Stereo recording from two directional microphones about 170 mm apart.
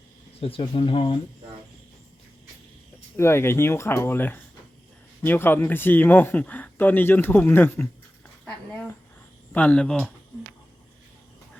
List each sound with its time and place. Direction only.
0.3 s speech: 35° left (ahead or behind)
3.2 s speech: 15° left (ahead or behind)
8.4 s a sound: 5° left (ahead or behind)
9.5 s speech: 10° left (ahead or behind)